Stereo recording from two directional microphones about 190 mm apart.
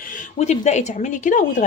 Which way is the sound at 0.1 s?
35° left (ahead or behind).